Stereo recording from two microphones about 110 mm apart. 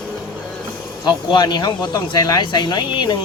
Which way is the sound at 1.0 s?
40° left (ahead or behind).